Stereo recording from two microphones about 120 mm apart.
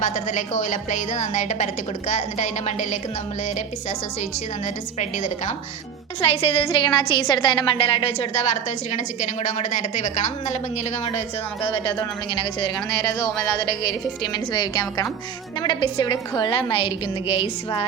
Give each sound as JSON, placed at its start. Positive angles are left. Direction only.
{"t": 0.0, "sound": "a woman's voice", "side_deg": 90}
{"t": 6.2, "sound": "a woman's voice", "side_deg": 45}
{"t": 8.9, "sound": "a woman's voice", "side_deg": 85}
{"t": 11.6, "sound": "a woman's voice", "side_deg": 45}
{"t": 12.7, "sound": "a woman's voice", "side_deg": 30}